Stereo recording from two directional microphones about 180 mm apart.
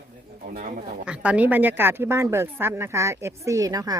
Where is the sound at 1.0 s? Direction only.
5° right (ahead or behind).